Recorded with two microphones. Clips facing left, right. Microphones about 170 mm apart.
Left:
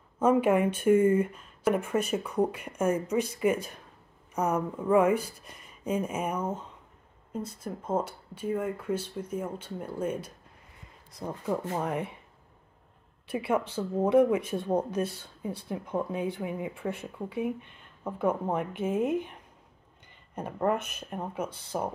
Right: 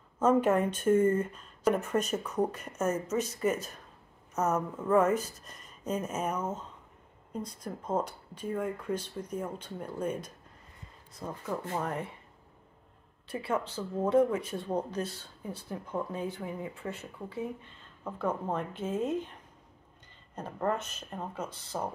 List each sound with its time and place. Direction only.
0.2 s a woman's voice: 10° left (ahead or behind)
13.3 s a woman's voice: 15° left (ahead or behind)
20.3 s a woman's voice: 15° left (ahead or behind)